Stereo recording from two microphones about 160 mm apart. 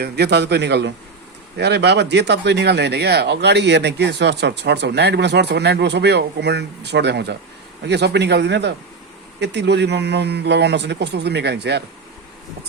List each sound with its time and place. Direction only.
0.0 s speech: 90° right